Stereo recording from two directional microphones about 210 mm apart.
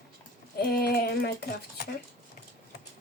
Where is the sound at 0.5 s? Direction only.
50° left (ahead or behind).